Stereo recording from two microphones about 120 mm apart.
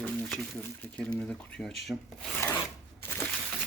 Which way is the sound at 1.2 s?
5° left (ahead or behind).